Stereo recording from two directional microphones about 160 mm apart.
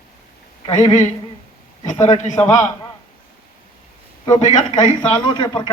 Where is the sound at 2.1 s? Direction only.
45° left (ahead or behind).